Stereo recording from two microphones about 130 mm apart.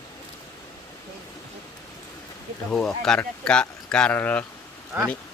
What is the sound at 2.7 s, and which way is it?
Speech, 5° left (ahead or behind).